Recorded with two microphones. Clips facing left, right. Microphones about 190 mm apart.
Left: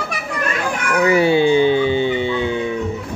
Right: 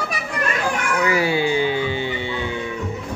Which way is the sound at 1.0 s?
25° left (ahead or behind).